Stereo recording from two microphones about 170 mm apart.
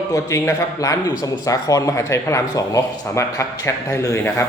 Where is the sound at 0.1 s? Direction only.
20° left (ahead or behind).